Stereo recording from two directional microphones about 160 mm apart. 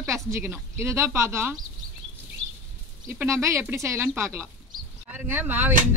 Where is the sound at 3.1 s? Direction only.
15° right (ahead or behind).